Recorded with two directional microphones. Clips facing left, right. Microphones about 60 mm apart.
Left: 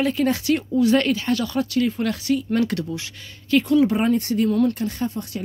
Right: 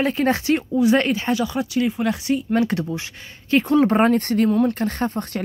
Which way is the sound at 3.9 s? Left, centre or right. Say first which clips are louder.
Right 3 dB; right.